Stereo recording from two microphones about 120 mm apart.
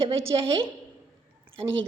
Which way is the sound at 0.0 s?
50° right (ahead or behind).